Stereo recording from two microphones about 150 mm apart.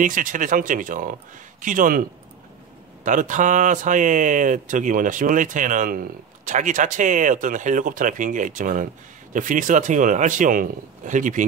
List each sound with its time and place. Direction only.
0.0 s speech: 60° right (ahead or behind)